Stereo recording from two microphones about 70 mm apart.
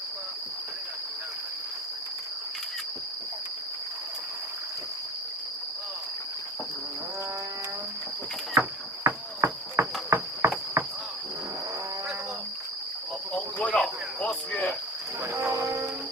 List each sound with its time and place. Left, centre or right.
9.0 s a sound: right
10.8 s cricket: right
13.3 s cricket: centre
15.2 s music: right